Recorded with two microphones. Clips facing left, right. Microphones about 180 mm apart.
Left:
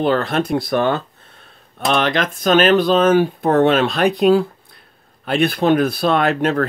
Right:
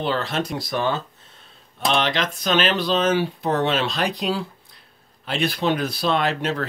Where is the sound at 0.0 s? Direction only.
50° left (ahead or behind).